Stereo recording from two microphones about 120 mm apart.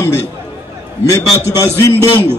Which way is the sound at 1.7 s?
25° left (ahead or behind).